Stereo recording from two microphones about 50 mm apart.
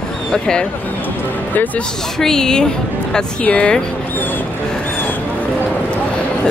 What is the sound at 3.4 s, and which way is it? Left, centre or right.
Speech, left.